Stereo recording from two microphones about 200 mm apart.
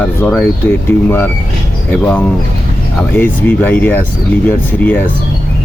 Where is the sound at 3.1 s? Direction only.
10° left (ahead or behind).